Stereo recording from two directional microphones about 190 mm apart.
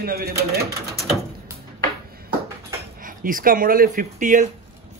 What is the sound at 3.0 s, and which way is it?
Speech, 45° right (ahead or behind).